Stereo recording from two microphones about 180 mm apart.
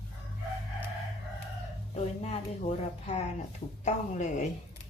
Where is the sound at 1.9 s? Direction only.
35° left (ahead or behind).